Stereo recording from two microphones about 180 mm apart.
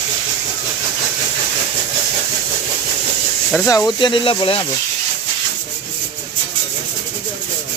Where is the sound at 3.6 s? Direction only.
20° left (ahead or behind).